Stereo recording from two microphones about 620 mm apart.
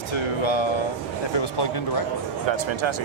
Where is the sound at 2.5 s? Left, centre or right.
Right.